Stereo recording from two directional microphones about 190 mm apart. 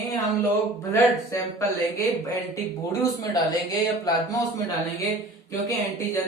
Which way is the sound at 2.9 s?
20° left (ahead or behind).